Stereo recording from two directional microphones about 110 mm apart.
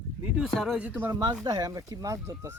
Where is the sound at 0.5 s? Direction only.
Centre (ahead or behind).